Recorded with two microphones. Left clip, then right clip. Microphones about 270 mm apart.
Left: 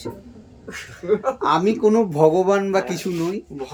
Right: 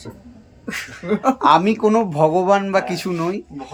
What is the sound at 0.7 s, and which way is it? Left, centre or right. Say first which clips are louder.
Speech: left 1 dB; right.